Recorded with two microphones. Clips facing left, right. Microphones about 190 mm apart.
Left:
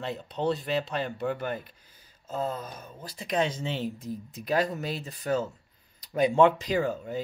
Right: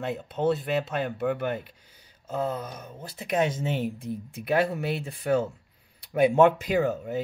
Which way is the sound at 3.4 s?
50° right (ahead or behind).